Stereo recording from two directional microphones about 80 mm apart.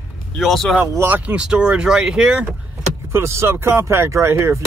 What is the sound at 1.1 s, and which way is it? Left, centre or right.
Speech, centre.